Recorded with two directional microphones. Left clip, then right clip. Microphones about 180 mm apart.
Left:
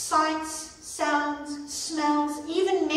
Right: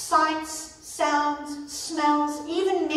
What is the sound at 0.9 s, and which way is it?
A woman's voice, centre (ahead or behind).